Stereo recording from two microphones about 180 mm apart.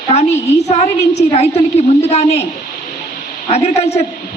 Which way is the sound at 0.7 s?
40° left (ahead or behind).